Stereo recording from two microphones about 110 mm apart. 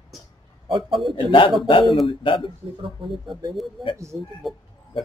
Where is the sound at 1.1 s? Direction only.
50° left (ahead or behind).